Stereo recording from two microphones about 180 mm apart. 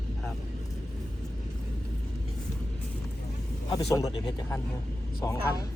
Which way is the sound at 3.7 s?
20° left (ahead or behind).